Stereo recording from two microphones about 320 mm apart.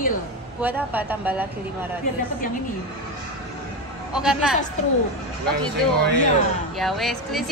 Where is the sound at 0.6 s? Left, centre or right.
Centre.